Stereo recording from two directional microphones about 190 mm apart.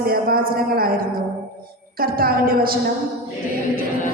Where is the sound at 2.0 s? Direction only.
50° right (ahead or behind).